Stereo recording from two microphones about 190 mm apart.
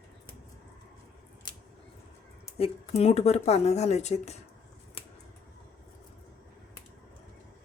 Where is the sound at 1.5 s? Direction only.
25° left (ahead or behind).